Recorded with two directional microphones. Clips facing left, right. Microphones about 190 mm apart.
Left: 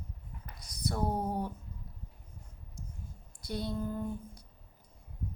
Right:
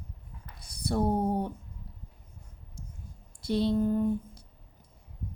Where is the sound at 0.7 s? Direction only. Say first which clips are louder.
Right 6 dB; 30° right (ahead or behind).